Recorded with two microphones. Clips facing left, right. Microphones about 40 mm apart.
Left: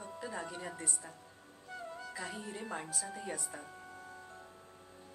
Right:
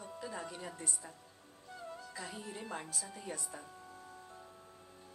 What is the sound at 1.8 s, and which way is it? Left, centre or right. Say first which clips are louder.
Speech: left 2 dB; centre.